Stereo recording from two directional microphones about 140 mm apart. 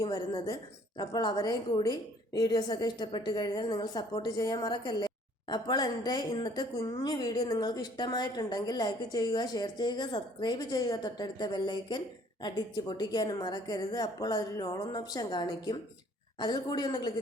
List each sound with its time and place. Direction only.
0.0 s a woman's voice: 30° left (ahead or behind)